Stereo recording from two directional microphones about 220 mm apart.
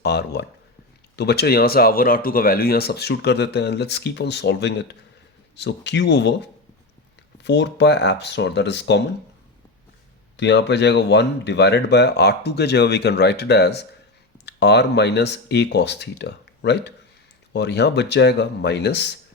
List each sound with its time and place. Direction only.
0.0 s speech: 50° left (ahead or behind)
10.3 s speech: 50° left (ahead or behind)